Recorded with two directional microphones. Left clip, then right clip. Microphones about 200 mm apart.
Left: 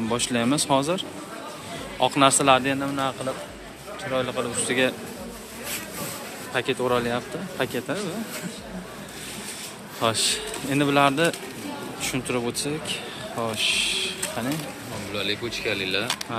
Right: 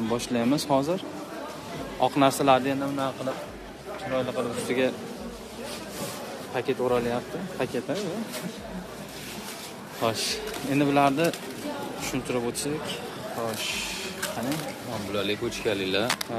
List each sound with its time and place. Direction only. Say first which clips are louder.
0.1 s a man's voice: left 3 dB; 5° right (ahead or behind)
4.1 s speech: left 2 dB; centre (ahead or behind)
6.5 s speech: left 2 dB; centre (ahead or behind)
10.0 s speech: left 4 dB; centre (ahead or behind)
15.1 s speech: left 2 dB; 45° right (ahead or behind)